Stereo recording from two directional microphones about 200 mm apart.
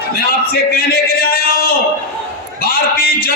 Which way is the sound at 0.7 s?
50° left (ahead or behind).